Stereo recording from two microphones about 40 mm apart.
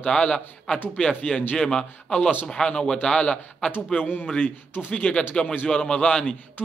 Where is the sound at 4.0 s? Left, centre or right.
Left.